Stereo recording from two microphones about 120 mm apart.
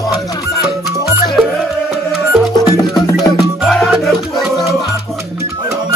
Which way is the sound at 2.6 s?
30° left (ahead or behind).